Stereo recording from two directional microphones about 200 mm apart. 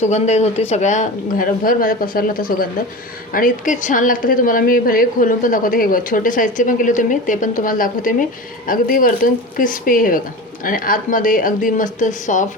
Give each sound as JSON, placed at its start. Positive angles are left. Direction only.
{"t": 0.0, "sound": "a woman's voice", "side_deg": 35}